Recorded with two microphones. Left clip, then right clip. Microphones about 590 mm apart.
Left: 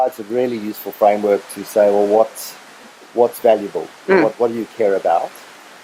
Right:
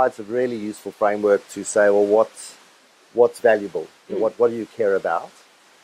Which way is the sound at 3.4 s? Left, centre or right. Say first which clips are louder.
Left 3 dB; right.